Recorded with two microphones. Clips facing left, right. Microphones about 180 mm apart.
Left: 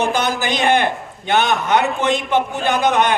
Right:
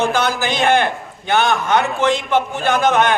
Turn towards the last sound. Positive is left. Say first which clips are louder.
# right 1 dB
turn(degrees=15)  # may be behind; listen again after turning